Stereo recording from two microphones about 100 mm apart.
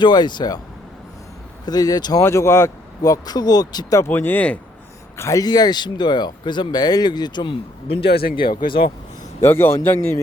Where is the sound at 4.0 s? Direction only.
20° left (ahead or behind).